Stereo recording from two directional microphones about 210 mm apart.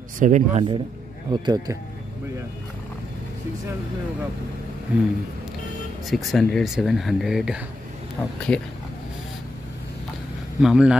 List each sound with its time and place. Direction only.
0.2 s speech: 35° right (ahead or behind)
1.3 s speech: 20° right (ahead or behind)
4.9 s speech: 5° right (ahead or behind)
8.2 s speech: 10° left (ahead or behind)
10.6 s speech: 5° right (ahead or behind)